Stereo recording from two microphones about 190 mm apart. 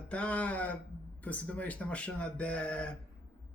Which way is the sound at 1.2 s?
10° left (ahead or behind).